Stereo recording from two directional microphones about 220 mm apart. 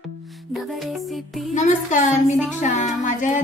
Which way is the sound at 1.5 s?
35° left (ahead or behind).